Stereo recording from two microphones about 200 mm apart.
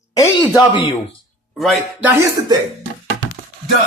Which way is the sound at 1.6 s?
Centre (ahead or behind).